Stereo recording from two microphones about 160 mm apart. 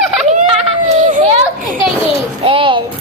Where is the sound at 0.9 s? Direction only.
50° right (ahead or behind).